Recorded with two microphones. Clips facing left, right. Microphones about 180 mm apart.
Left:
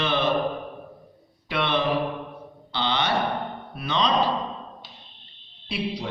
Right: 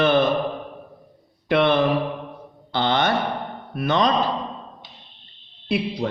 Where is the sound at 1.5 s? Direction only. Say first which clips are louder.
Right 6 dB; 50° right (ahead or behind).